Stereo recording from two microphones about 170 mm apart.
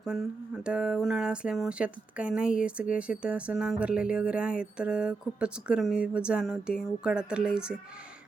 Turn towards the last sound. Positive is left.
turn(degrees=-5)  # may be behind; listen again after turning